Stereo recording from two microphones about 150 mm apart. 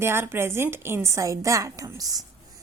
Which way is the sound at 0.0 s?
15° right (ahead or behind).